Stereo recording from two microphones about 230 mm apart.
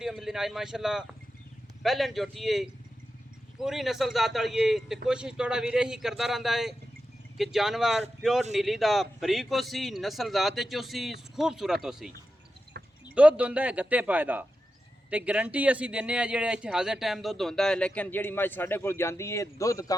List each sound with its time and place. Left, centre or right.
0.0 s a man's voice: centre
12.7 s a sound: right
13.1 s a man's voice: centre